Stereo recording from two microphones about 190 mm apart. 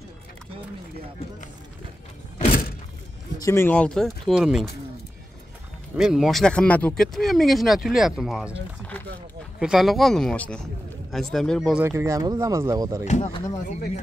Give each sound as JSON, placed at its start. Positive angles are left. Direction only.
{"t": 3.4, "sound": "speech", "side_deg": 10}
{"t": 5.9, "sound": "speech", "side_deg": -5}
{"t": 9.6, "sound": "speech", "side_deg": 0}
{"t": 13.0, "sound": "speech", "side_deg": 40}